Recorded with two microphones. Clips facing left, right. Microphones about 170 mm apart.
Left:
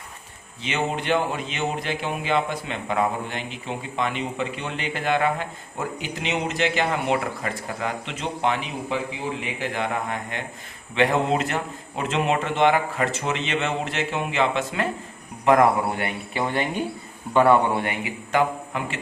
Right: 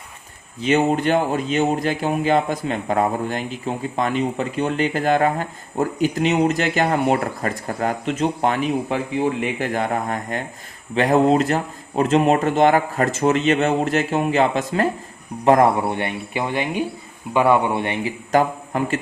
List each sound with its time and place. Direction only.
0.6 s a man's voice: 40° right (ahead or behind); by 17.9 s 15° right (ahead or behind)
18.0 s speech: 40° right (ahead or behind)